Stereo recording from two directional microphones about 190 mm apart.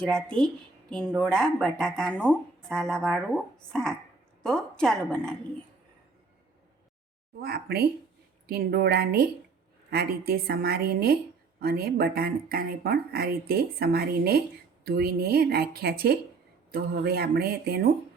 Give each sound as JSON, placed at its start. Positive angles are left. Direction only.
{"t": 0.0, "sound": "speech", "side_deg": 5}
{"t": 7.4, "sound": "speech", "side_deg": -55}